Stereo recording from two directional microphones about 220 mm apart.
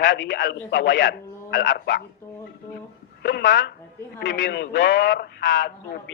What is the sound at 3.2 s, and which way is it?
A man's voice, 50° left (ahead or behind).